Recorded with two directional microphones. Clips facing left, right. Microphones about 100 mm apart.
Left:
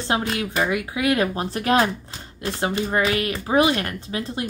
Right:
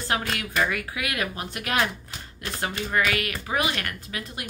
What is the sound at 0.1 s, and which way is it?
Speech, 25° left (ahead or behind).